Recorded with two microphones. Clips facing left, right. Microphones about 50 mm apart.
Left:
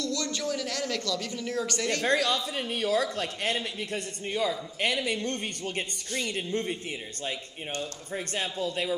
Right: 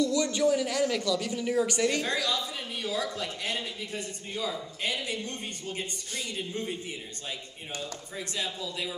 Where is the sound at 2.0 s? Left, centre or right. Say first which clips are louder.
Left 4 dB; left.